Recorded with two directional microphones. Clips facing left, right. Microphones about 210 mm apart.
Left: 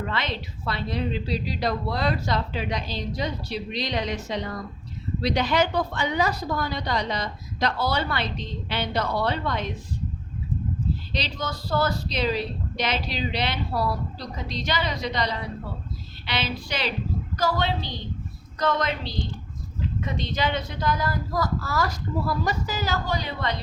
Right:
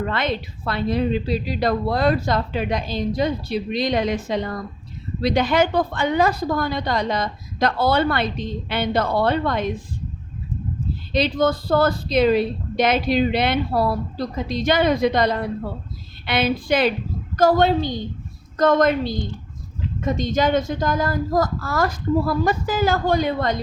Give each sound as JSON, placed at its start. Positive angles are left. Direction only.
{"t": 0.1, "sound": "a woman's voice", "side_deg": -50}
{"t": 11.1, "sound": "a woman's voice", "side_deg": -55}